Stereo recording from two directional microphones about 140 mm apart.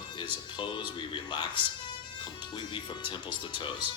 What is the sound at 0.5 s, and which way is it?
Speech, 35° left (ahead or behind).